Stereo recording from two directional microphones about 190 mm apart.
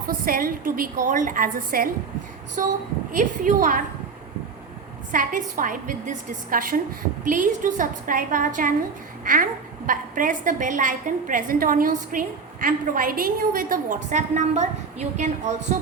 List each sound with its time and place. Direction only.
0.1 s a woman's voice: 50° right (ahead or behind)
5.1 s a woman's voice: 45° right (ahead or behind)